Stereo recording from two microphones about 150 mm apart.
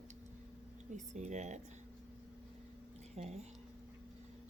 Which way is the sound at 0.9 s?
50° right (ahead or behind).